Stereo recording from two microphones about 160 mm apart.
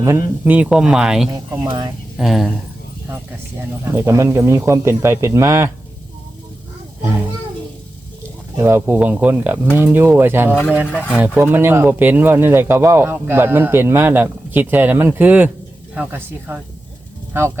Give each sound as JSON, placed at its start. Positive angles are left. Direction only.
{"t": 0.0, "sound": "speech", "side_deg": -15}
{"t": 1.3, "sound": "speech", "side_deg": -25}
{"t": 2.1, "sound": "speech", "side_deg": 0}
{"t": 3.8, "sound": "speech", "side_deg": -15}
{"t": 7.0, "sound": "a child's voice", "side_deg": -15}
{"t": 8.5, "sound": "speech", "side_deg": -15}